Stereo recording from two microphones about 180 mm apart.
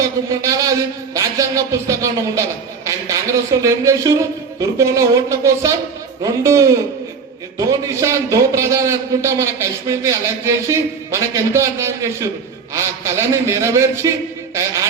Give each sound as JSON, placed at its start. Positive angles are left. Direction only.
{"t": 0.0, "sound": "a man's voice", "side_deg": -20}